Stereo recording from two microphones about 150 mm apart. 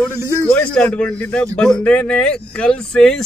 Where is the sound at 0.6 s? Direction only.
5° left (ahead or behind).